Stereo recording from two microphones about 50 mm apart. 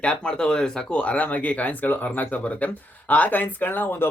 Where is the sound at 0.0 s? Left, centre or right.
Left.